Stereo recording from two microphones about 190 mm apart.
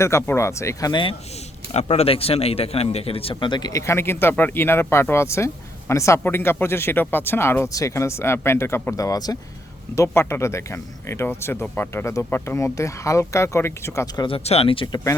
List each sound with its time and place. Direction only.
0.0 s speech: 15° left (ahead or behind)
1.7 s a man's voice: 35° left (ahead or behind); by 14.3 s 15° left (ahead or behind)
14.3 s a man's voice: 30° left (ahead or behind)